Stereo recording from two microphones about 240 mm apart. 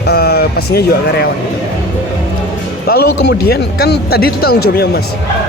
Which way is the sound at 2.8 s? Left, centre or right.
Left.